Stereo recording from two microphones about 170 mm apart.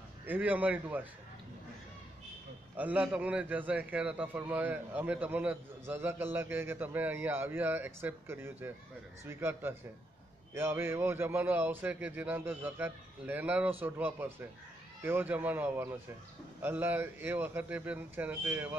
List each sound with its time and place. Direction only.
0.3 s a man's voice: 10° right (ahead or behind)
2.8 s a man's voice: 10° right (ahead or behind)